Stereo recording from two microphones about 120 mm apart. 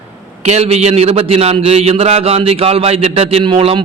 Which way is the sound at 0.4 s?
65° right (ahead or behind).